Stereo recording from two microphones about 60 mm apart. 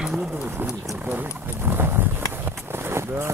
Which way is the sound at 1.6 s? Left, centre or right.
Right.